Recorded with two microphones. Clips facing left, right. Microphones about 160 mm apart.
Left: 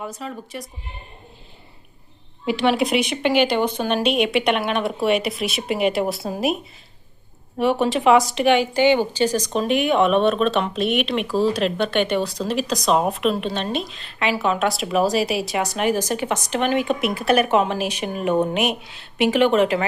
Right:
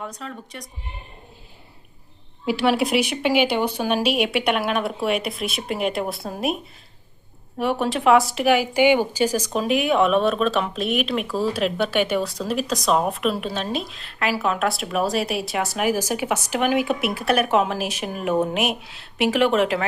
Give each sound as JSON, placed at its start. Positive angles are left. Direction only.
{"t": 0.0, "sound": "speech", "side_deg": 5}
{"t": 2.5, "sound": "speech", "side_deg": -5}
{"t": 7.6, "sound": "speech", "side_deg": 0}